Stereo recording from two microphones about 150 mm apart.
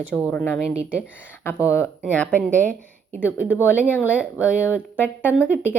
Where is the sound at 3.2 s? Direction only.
15° left (ahead or behind).